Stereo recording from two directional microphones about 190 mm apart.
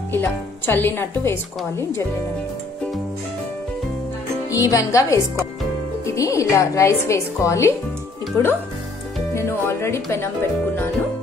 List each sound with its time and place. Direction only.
0.1 s a woman's voice: 10° left (ahead or behind)
4.5 s a woman's voice: 15° left (ahead or behind)